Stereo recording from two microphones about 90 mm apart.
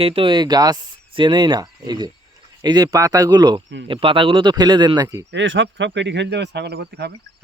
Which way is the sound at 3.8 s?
75° right (ahead or behind).